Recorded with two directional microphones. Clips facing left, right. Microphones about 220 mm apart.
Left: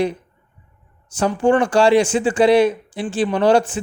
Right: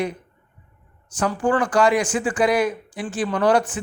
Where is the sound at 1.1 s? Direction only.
25° left (ahead or behind).